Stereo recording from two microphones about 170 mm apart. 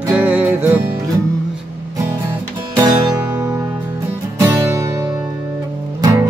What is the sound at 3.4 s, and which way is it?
Music, 20° right (ahead or behind).